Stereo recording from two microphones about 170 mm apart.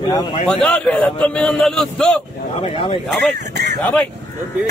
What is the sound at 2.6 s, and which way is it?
Speech, 35° left (ahead or behind).